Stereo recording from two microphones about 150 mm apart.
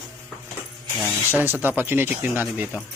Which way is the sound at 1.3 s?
15° right (ahead or behind).